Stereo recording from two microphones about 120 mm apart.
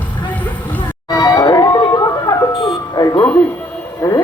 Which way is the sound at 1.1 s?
30° left (ahead or behind).